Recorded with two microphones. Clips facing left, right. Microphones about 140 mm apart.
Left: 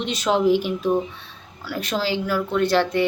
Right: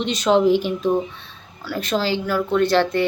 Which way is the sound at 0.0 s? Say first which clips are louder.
Right 3 dB; 5° left (ahead or behind).